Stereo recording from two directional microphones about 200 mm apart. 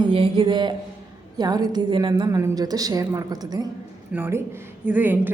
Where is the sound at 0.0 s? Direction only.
25° right (ahead or behind).